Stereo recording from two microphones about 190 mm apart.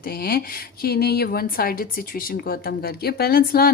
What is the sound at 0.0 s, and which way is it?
Speech, 50° left (ahead or behind).